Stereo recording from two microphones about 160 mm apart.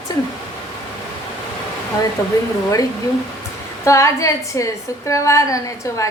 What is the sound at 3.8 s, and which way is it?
A woman's voice, 20° left (ahead or behind).